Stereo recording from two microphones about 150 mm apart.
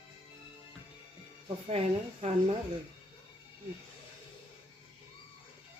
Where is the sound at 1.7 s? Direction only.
45° right (ahead or behind).